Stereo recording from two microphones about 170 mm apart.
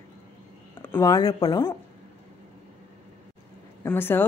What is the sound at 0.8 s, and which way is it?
Speech, 15° left (ahead or behind).